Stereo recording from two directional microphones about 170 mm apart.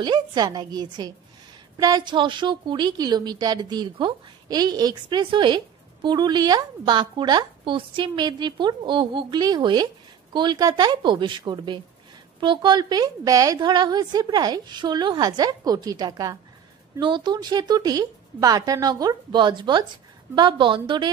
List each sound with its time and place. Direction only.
0.0 s a woman's voice: 25° right (ahead or behind)